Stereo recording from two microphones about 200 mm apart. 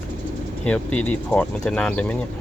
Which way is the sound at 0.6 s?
5° left (ahead or behind).